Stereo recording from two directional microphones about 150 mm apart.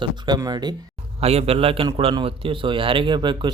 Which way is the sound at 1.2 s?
45° right (ahead or behind).